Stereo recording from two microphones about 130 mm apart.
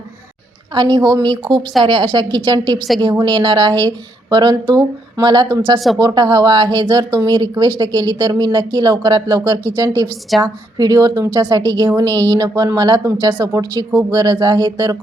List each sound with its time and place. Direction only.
0.7 s a woman's voice: 35° right (ahead or behind)